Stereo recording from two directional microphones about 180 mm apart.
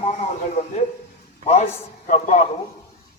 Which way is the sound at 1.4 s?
35° left (ahead or behind).